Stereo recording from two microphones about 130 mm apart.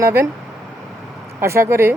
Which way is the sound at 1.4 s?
20° right (ahead or behind).